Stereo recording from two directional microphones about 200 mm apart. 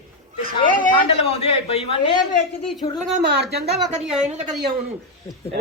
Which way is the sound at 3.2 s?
55° right (ahead or behind).